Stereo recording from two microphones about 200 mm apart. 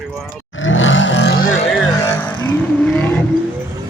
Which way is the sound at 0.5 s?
70° left (ahead or behind).